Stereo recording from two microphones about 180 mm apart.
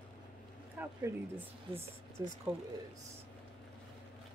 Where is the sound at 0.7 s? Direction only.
10° right (ahead or behind).